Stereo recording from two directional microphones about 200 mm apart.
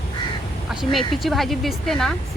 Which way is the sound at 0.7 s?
Centre (ahead or behind).